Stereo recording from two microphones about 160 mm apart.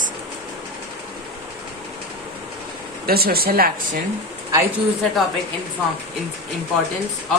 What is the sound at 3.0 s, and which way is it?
Speech, 70° right (ahead or behind).